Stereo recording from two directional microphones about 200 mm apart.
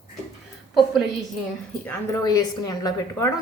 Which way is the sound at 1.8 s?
15° left (ahead or behind).